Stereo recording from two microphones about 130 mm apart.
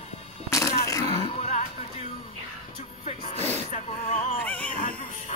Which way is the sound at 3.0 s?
55° left (ahead or behind).